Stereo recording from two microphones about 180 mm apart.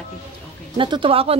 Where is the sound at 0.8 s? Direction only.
30° right (ahead or behind).